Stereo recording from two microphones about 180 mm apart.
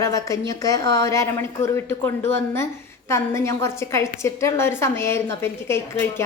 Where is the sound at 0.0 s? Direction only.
15° left (ahead or behind).